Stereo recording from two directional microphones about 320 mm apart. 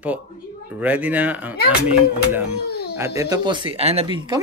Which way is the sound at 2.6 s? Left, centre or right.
Left.